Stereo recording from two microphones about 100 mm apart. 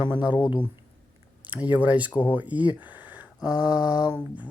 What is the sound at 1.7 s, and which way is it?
Speech, 15° right (ahead or behind).